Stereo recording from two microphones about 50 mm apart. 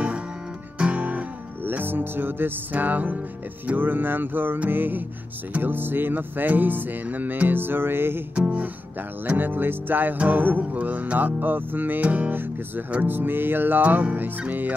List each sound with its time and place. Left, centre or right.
0.7 s music: right
3.6 s speech: right
9.2 s speech: right
13.0 s music: right
13.8 s speech: right